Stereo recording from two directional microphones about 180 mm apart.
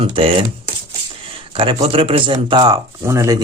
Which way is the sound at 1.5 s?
30° right (ahead or behind).